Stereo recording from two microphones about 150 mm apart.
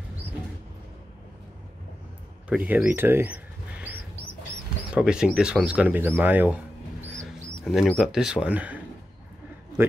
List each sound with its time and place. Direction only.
2.5 s speech: 10° right (ahead or behind)
4.9 s speech: 5° right (ahead or behind)
7.2 s a man's voice: centre (ahead or behind)